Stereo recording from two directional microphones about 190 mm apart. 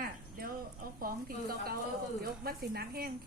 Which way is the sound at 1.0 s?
50° right (ahead or behind).